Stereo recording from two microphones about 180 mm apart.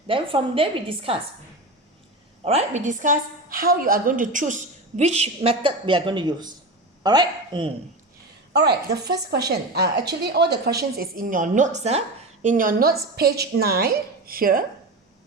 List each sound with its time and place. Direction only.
0.1 s a woman's voice: 30° right (ahead or behind)
2.4 s a woman's voice: 35° right (ahead or behind)
8.5 s a woman's voice: 65° right (ahead or behind)